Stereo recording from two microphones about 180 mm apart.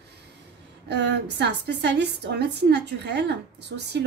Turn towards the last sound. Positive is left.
turn(degrees=-70)  # may be behind; listen again after turning